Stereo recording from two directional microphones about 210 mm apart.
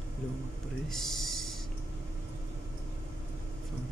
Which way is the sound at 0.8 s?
Centre (ahead or behind).